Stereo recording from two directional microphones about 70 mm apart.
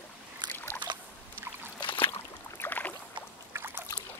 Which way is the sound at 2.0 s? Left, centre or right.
Left.